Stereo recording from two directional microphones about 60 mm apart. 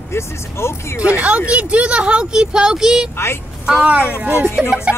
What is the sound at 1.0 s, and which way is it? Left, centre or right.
Speech, right.